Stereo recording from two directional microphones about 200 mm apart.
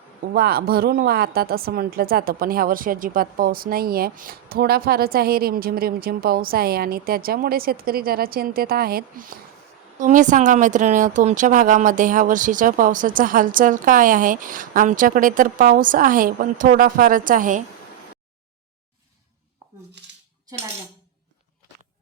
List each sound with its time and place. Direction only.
0.3 s a woman's voice: 50° right (ahead or behind)